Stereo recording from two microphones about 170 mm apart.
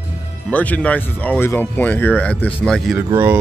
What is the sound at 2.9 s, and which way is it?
Speech, 15° right (ahead or behind).